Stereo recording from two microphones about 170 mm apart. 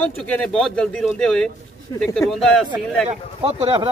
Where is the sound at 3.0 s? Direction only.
35° right (ahead or behind).